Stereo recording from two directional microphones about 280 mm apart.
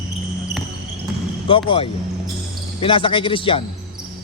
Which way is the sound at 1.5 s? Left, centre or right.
Centre.